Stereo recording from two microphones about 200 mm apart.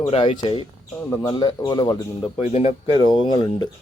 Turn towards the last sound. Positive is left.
turn(degrees=25)  # may be behind; listen again after turning